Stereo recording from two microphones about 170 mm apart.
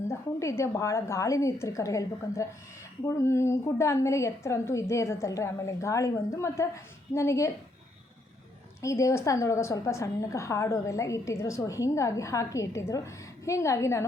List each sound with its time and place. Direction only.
0.1 s a woman's voice: 15° left (ahead or behind)
8.8 s a woman's voice: 20° left (ahead or behind)